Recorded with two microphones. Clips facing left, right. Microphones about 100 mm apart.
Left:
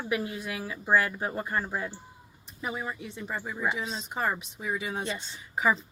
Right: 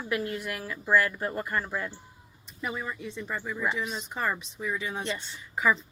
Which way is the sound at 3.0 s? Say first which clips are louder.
Right 2 dB; 55° left (ahead or behind).